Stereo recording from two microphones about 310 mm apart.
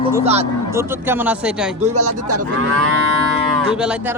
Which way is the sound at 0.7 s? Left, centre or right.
Centre.